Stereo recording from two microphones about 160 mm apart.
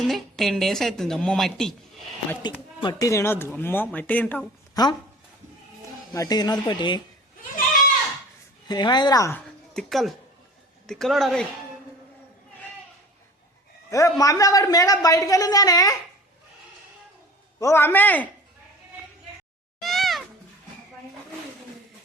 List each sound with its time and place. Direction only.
0.0 s a woman's voice: centre (ahead or behind)
2.4 s speech: 25° left (ahead or behind)
4.7 s speech: 25° left (ahead or behind)
6.1 s a man's voice: 25° left (ahead or behind)
8.6 s a man's voice: 25° left (ahead or behind)
9.7 s a woman's voice: centre (ahead or behind)
13.9 s a man's voice: 20° left (ahead or behind)
17.6 s speech: 15° left (ahead or behind)
19.8 s cat: centre (ahead or behind)